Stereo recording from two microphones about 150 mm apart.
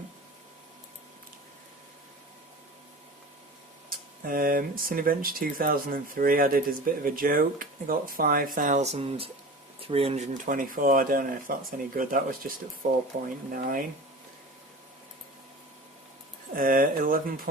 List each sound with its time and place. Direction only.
3.8 s speech: 70° right (ahead or behind); by 10.2 s 40° right (ahead or behind)
10.3 s speech: 65° right (ahead or behind)
16.6 s speech: 70° right (ahead or behind)